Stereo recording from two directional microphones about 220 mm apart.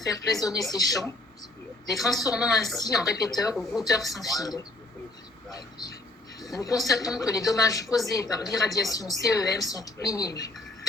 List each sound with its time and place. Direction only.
0.1 s a woman's voice: 15° left (ahead or behind)
2.0 s a woman's voice: centre (ahead or behind)
2.7 s a woman's voice: 15° left (ahead or behind)
3.5 s a woman's voice: centre (ahead or behind)
3.8 s a woman's voice: 15° left (ahead or behind)